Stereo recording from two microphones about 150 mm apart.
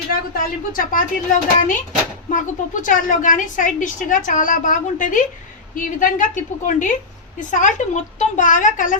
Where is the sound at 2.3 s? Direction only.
60° left (ahead or behind).